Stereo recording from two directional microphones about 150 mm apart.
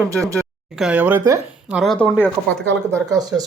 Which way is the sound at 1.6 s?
Centre (ahead or behind).